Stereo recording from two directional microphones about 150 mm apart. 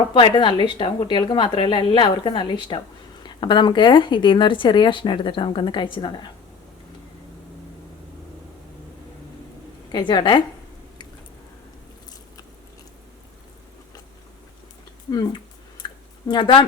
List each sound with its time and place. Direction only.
0.1 s speech: 30° left (ahead or behind)
9.9 s speech: 30° left (ahead or behind)
15.1 s speech: 25° left (ahead or behind)
15.8 s a sound: 30° left (ahead or behind)
16.3 s speech: 30° left (ahead or behind)